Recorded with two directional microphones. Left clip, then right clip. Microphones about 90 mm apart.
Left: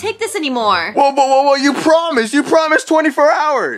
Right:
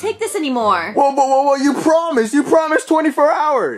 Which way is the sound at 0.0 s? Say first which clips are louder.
Left 1 dB; 25° left (ahead or behind).